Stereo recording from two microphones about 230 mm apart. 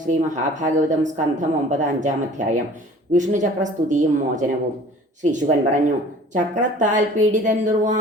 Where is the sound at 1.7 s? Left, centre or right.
Right.